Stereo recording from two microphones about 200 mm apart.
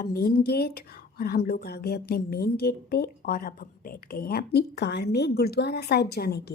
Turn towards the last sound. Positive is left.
turn(degrees=55)  # may be behind; listen again after turning